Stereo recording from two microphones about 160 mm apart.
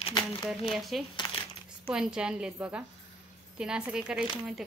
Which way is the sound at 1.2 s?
30° left (ahead or behind).